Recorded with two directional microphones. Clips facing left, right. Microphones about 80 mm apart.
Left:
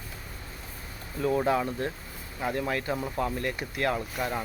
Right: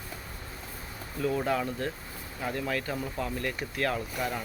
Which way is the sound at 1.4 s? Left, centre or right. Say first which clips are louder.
Left 3 dB; left.